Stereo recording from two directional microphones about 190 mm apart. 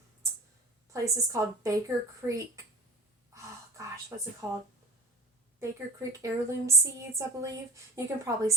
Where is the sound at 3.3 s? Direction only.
15° right (ahead or behind).